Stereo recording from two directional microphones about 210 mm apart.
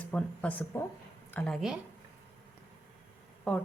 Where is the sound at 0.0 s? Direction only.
5° left (ahead or behind).